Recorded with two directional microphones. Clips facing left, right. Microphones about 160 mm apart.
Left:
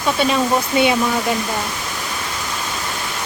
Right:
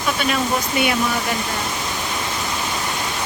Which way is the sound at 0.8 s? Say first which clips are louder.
Left 5 dB; 25° left (ahead or behind).